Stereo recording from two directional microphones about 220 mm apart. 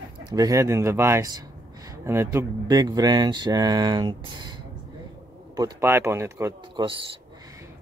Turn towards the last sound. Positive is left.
turn(degrees=-15)  # may be behind; listen again after turning